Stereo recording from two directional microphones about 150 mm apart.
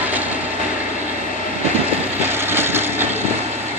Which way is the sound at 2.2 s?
15° right (ahead or behind).